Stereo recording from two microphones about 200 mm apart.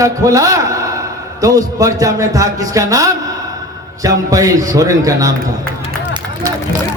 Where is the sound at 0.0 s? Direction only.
15° right (ahead or behind).